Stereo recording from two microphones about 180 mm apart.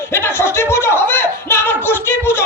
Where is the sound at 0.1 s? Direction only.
15° left (ahead or behind).